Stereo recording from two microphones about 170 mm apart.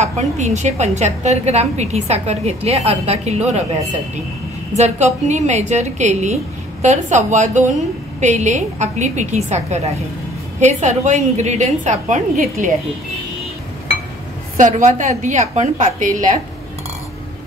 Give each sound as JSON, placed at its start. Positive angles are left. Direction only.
{"t": 0.0, "sound": "a woman's voice", "side_deg": -40}
{"t": 4.7, "sound": "a woman's voice", "side_deg": -40}
{"t": 14.6, "sound": "a woman's voice", "side_deg": -45}